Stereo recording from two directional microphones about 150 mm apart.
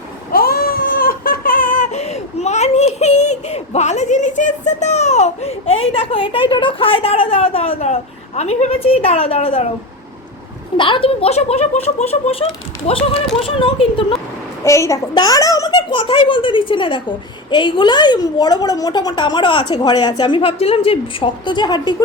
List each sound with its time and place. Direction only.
0.3 s a sound: 85° left; by 7.9 s 45° left (ahead or behind)
8.4 s a child's voice: 45° left (ahead or behind)
10.8 s a child's voice: 35° left (ahead or behind)
14.6 s a child's voice: 20° left (ahead or behind)